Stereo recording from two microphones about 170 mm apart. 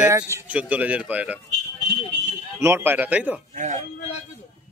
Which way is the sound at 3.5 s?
45° right (ahead or behind).